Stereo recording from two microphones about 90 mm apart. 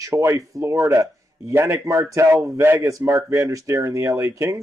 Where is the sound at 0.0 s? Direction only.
35° right (ahead or behind).